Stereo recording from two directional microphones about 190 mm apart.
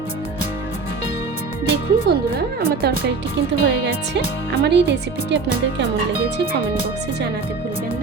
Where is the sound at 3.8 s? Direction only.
65° right (ahead or behind).